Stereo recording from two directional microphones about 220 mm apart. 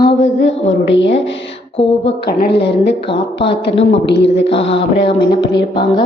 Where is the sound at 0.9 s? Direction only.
55° left (ahead or behind).